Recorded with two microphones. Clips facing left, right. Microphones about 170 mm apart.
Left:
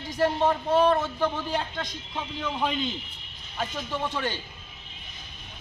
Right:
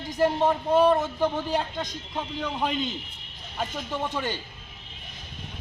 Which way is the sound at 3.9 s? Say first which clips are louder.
Even; 15° right (ahead or behind).